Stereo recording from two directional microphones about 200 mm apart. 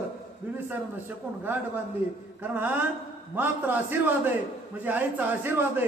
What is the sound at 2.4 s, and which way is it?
Speech, 10° right (ahead or behind).